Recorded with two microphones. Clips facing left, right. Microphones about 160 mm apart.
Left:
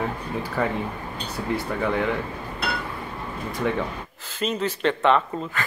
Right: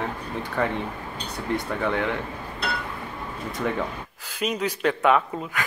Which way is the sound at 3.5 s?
Centre (ahead or behind).